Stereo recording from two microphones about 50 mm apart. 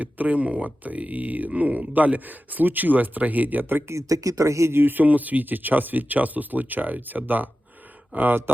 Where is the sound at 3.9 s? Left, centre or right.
Right.